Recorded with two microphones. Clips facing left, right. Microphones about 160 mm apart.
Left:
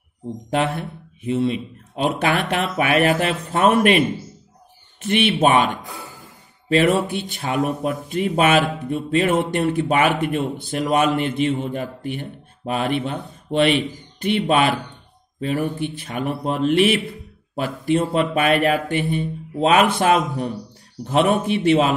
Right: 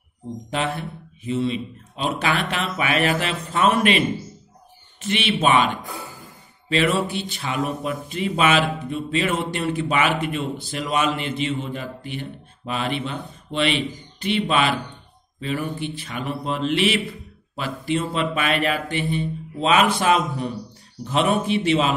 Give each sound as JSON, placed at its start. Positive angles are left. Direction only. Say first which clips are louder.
{"t": 0.5, "sound": "speech", "louder": "left 4 dB", "side_deg": 55}
{"t": 5.0, "sound": "speech", "louder": "left 4 dB", "side_deg": 50}
{"t": 6.7, "sound": "speech", "louder": "left 4 dB", "side_deg": 50}